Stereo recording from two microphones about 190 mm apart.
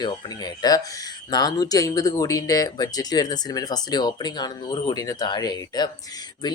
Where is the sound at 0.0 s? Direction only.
20° left (ahead or behind).